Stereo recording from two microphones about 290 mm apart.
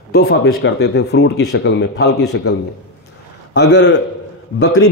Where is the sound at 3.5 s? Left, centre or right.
Left.